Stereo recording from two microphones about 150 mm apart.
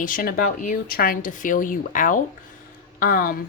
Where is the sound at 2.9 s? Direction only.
75° left (ahead or behind).